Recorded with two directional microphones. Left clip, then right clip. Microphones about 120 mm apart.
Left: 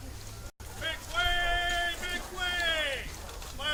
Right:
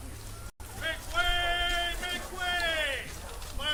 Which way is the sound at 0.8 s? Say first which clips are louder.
Right 1 dB; 50° right (ahead or behind).